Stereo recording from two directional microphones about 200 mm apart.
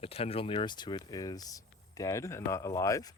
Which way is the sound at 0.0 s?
30° left (ahead or behind).